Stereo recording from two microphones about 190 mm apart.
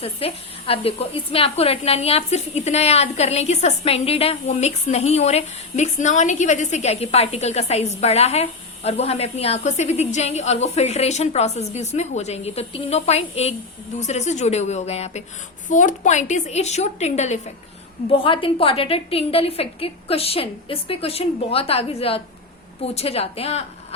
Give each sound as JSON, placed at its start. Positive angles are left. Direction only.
{"t": 0.0, "sound": "a woman's voice", "side_deg": 30}